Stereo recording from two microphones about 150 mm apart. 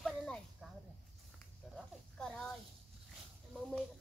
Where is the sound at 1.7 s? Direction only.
5° left (ahead or behind).